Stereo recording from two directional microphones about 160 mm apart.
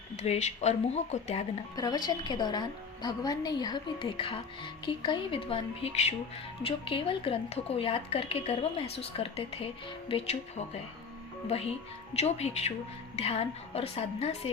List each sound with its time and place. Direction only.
0.2 s speech: 45° left (ahead or behind)
1.7 s a woman's voice: 25° left (ahead or behind)
11.4 s speech: 40° left (ahead or behind)